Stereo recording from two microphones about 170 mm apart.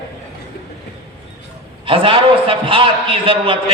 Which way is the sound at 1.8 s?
30° right (ahead or behind).